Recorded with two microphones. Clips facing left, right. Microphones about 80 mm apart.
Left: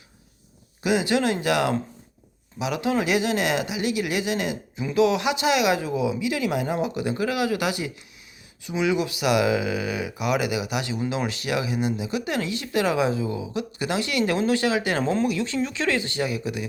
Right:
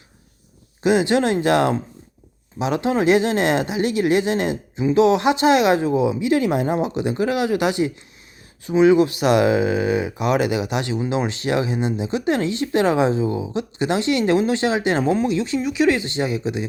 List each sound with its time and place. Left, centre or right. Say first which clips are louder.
0.8 s speech: right 5 dB; right